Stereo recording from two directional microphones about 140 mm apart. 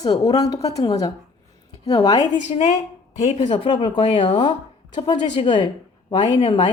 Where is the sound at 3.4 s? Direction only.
35° left (ahead or behind).